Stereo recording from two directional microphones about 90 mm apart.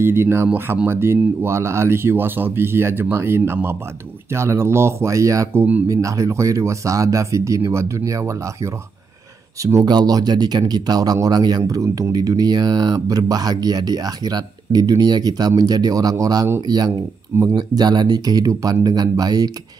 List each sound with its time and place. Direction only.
0.0 s speech: 25° right (ahead or behind)
5.9 s speech: 40° right (ahead or behind)
9.8 s speech: 50° right (ahead or behind)